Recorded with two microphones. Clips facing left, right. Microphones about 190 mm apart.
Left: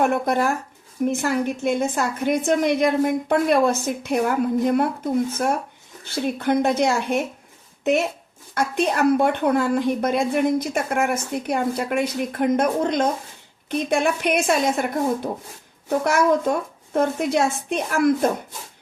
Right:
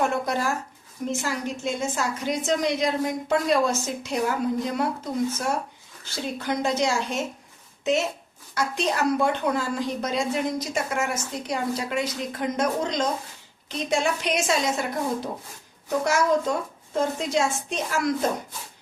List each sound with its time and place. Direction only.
0.0 s a woman's voice: 55° left (ahead or behind)